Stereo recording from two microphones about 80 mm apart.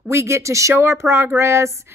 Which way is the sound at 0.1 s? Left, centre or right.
Right.